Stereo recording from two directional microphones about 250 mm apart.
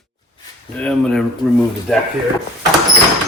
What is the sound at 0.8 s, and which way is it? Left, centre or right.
Speech, centre.